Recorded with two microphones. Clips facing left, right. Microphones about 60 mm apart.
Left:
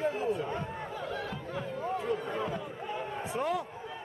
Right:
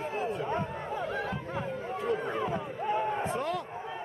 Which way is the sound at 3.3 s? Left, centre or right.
Centre.